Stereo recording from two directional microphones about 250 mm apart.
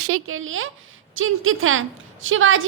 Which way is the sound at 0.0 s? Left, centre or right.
Right.